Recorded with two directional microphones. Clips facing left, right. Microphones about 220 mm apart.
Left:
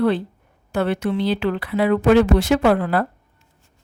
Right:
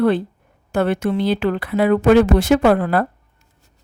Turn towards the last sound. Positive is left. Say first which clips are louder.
# right 2 dB
turn(degrees=-50)  # may be behind; listen again after turning